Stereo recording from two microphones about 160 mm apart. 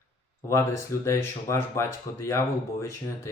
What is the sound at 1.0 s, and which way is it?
Speech, 15° left (ahead or behind).